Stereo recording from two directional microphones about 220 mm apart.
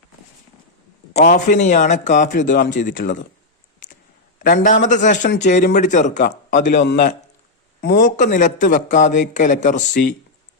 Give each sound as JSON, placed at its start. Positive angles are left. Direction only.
{"t": 1.1, "sound": "a man's voice", "side_deg": 35}
{"t": 2.5, "sound": "a man's voice", "side_deg": 50}
{"t": 2.8, "sound": "a man's voice", "side_deg": 40}
{"t": 4.4, "sound": "a man's voice", "side_deg": 40}
{"t": 8.0, "sound": "a man's voice", "side_deg": 35}